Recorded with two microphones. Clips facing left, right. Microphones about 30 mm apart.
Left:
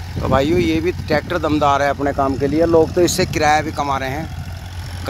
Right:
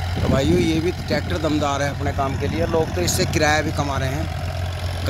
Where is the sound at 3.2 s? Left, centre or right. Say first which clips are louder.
Left 3 dB; centre.